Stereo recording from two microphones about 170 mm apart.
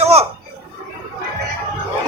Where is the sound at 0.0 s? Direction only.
35° right (ahead or behind).